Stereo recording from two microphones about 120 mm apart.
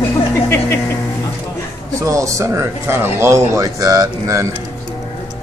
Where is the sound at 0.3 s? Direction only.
20° left (ahead or behind).